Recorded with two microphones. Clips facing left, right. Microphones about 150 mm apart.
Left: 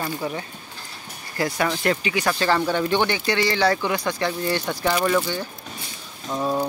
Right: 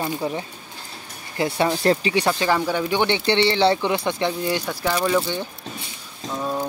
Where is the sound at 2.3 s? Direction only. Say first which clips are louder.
Left 2 dB; 15° right (ahead or behind).